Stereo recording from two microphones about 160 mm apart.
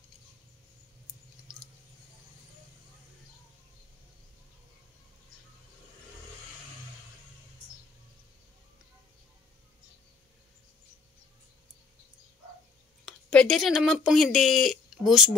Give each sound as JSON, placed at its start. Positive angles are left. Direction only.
{"t": 13.0, "sound": "speech", "side_deg": 5}